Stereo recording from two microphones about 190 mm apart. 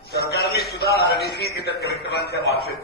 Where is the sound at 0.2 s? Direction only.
55° left (ahead or behind).